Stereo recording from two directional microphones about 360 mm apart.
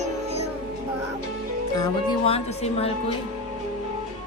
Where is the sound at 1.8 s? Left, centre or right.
Centre.